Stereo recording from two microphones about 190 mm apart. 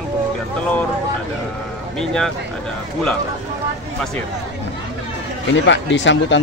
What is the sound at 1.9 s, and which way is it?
Speech, 5° left (ahead or behind).